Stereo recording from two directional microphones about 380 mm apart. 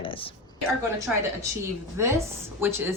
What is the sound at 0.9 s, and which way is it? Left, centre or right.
A woman's voice, centre.